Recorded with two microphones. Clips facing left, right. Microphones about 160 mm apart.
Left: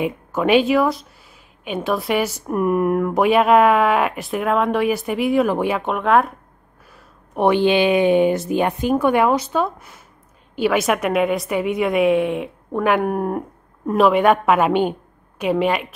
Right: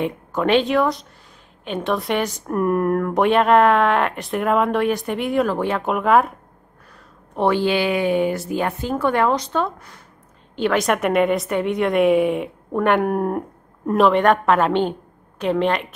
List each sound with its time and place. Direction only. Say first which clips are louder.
0.0 s a woman's voice: left 1 dB; 5° left (ahead or behind)
5.8 s speech: right 3 dB; centre (ahead or behind)
7.3 s a woman's voice: left 3 dB; 20° left (ahead or behind)